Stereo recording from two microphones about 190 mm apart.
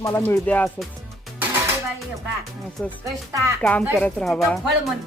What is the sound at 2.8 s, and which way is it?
Speech, 5° left (ahead or behind).